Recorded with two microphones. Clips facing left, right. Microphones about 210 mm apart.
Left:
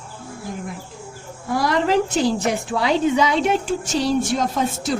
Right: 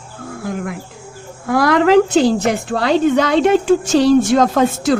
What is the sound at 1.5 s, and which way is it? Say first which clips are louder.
A woman's voice: right 7 dB; 85° right.